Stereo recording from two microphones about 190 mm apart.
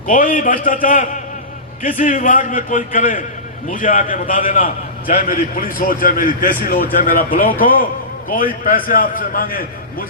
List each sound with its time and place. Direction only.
0.1 s a man's voice: 45° left (ahead or behind)